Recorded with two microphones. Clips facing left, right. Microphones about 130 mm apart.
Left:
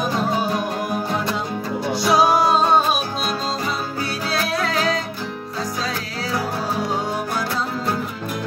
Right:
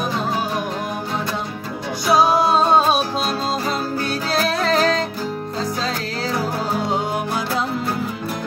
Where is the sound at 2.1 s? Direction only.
25° right (ahead or behind).